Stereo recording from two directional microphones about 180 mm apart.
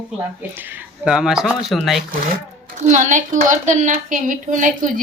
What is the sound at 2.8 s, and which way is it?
A woman's voice, 40° right (ahead or behind).